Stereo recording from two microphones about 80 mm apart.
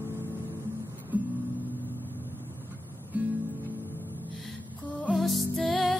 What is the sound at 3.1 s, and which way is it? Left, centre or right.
Guitar, centre.